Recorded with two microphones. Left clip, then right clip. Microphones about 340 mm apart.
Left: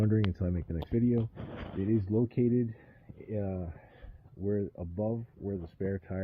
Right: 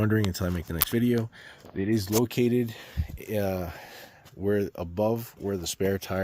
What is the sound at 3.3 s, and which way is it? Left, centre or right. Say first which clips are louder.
Speech: right 9 dB; right.